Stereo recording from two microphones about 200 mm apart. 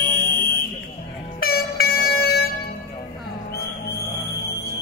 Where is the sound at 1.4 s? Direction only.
45° left (ahead or behind).